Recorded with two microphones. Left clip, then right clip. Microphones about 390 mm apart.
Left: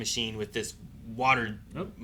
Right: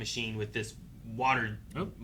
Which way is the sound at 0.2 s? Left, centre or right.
Right.